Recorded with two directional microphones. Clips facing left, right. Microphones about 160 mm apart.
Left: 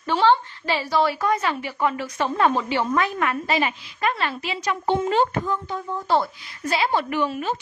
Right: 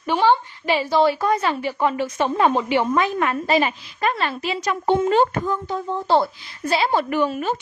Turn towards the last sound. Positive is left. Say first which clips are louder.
# right 3 dB
turn(degrees=-45)  # may be behind; listen again after turning